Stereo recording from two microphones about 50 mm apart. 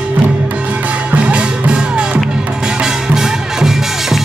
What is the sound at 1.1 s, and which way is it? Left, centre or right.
Music, right.